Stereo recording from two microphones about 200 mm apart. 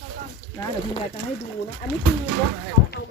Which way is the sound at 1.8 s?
45° left (ahead or behind).